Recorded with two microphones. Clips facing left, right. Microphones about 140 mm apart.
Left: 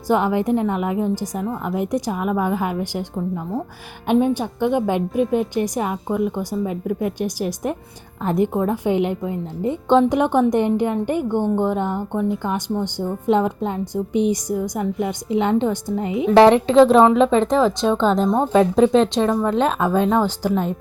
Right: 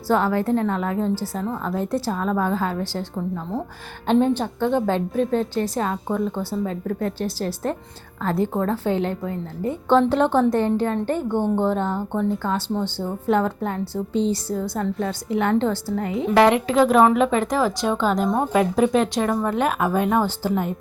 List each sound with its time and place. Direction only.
0.1 s a woman's voice: 15° left (ahead or behind)
16.3 s a woman's voice: 30° left (ahead or behind)